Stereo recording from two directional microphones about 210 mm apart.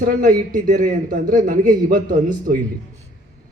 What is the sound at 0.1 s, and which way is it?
A man's voice, 40° right (ahead or behind).